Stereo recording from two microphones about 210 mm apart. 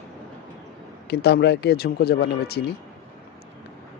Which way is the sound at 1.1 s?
50° left (ahead or behind).